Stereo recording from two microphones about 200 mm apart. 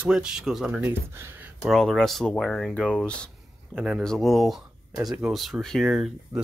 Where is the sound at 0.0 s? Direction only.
5° right (ahead or behind).